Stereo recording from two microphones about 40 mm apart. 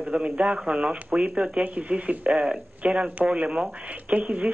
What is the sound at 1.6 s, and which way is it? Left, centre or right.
Speech, right.